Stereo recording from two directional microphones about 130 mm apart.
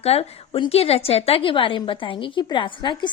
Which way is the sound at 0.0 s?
50° left (ahead or behind).